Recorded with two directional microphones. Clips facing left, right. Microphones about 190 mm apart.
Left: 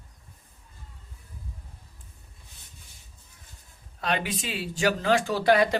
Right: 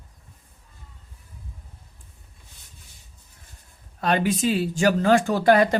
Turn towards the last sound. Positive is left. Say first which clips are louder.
# right 4 dB
turn(degrees=-50)  # may be behind; listen again after turning